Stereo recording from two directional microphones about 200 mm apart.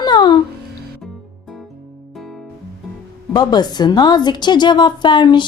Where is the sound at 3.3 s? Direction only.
20° left (ahead or behind).